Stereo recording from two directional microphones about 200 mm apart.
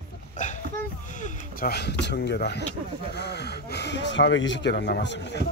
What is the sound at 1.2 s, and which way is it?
Speech, 50° left (ahead or behind).